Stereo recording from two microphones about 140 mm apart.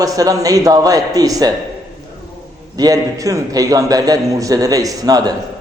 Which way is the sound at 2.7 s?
25° right (ahead or behind).